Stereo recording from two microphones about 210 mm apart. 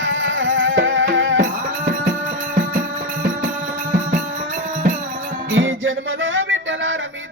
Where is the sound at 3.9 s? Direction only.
40° right (ahead or behind).